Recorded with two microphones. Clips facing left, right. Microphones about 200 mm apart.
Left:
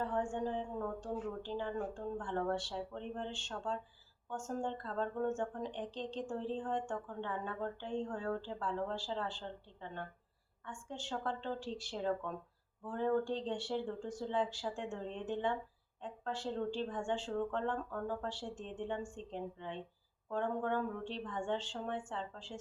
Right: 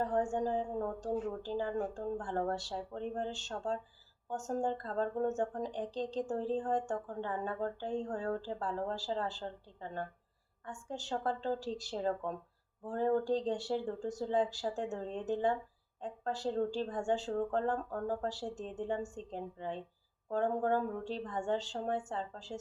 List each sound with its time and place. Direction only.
0.0 s speech: 40° right (ahead or behind)